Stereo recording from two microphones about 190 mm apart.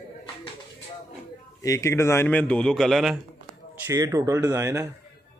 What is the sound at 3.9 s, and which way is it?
Speech, 15° right (ahead or behind).